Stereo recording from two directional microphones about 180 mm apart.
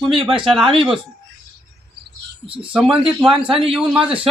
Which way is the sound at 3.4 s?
30° right (ahead or behind).